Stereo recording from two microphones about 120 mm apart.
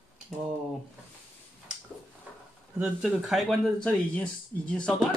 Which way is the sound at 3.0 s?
Centre (ahead or behind).